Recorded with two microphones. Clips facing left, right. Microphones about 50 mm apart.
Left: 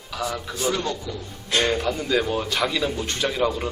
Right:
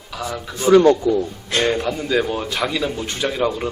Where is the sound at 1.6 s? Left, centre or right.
Centre.